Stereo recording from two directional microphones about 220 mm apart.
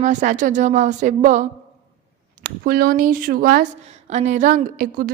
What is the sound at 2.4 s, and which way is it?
A woman's voice, 45° right (ahead or behind).